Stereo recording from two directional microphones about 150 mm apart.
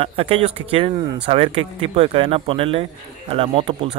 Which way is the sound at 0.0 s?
40° right (ahead or behind).